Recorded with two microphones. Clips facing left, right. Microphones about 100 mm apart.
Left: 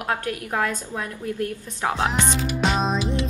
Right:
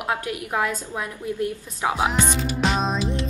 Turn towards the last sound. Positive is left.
turn(degrees=0)  # may be behind; listen again after turning